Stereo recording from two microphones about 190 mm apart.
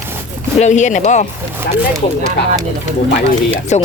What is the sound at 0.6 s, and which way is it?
Speech, 40° left (ahead or behind).